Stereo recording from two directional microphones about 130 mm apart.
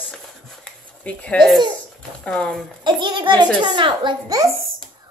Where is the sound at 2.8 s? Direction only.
40° right (ahead or behind).